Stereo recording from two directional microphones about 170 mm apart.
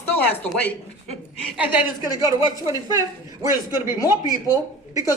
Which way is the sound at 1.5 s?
10° right (ahead or behind).